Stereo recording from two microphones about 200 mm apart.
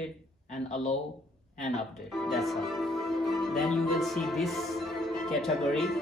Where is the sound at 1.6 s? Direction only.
Centre (ahead or behind).